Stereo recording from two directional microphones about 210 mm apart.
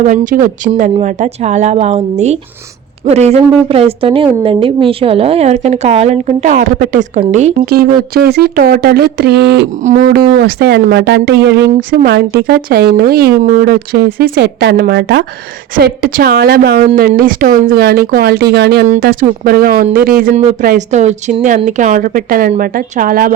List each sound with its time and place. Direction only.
0.0 s speech: 40° right (ahead or behind)
7.9 s speech: 50° right (ahead or behind)
9.8 s speech: 35° right (ahead or behind)
10.1 s speech: 45° right (ahead or behind)